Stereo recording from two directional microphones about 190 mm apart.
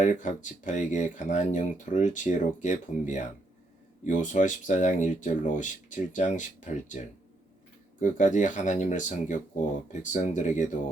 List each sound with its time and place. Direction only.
0.0 s speech: 40° left (ahead or behind)
8.0 s speech: 40° left (ahead or behind)